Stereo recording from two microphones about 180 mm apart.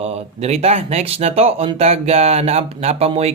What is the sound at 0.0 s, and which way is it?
Speech, 35° right (ahead or behind).